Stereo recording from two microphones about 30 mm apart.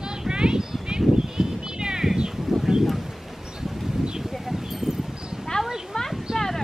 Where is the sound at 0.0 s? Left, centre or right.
Right.